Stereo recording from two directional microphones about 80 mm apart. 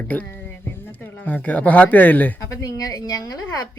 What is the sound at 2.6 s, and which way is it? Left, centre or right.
Speech, left.